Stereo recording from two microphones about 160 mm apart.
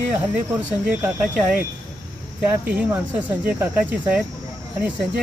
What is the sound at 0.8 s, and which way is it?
Speech, 10° right (ahead or behind).